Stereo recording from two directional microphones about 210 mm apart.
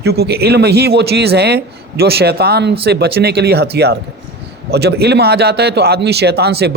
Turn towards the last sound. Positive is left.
turn(degrees=-50)  # may be behind; listen again after turning